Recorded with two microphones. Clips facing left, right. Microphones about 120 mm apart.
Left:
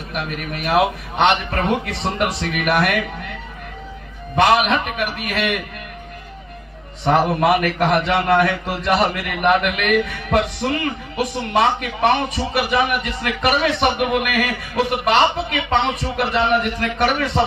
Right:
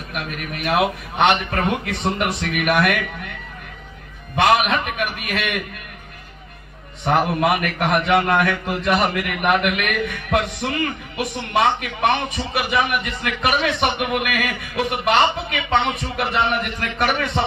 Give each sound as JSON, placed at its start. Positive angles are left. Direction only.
{"t": 0.1, "sound": "a man's voice", "side_deg": 40}
{"t": 4.4, "sound": "a man's voice", "side_deg": 35}
{"t": 7.0, "sound": "a man's voice", "side_deg": 35}
{"t": 9.6, "sound": "speech", "side_deg": -45}
{"t": 9.8, "sound": "a man's voice", "side_deg": 35}